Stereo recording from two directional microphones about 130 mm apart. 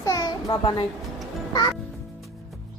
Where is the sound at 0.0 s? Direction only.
30° left (ahead or behind).